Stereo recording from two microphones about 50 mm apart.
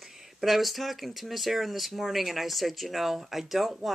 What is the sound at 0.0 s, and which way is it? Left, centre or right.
Speech, centre.